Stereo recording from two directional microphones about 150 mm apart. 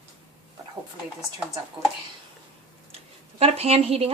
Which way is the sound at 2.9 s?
45° right (ahead or behind).